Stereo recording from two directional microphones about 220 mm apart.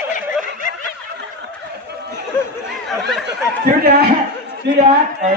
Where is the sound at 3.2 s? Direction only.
45° right (ahead or behind).